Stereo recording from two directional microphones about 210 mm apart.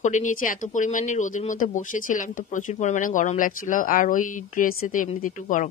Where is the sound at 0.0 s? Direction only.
35° left (ahead or behind).